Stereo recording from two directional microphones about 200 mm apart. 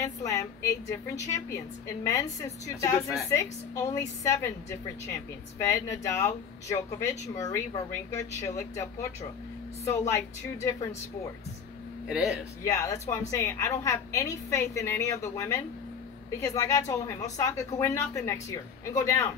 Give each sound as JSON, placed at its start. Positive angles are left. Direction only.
{"t": 0.0, "sound": "a woman's voice", "side_deg": 15}
{"t": 9.8, "sound": "a woman's voice", "side_deg": 15}
{"t": 12.1, "sound": "speech", "side_deg": 0}
{"t": 12.6, "sound": "a woman's voice", "side_deg": 15}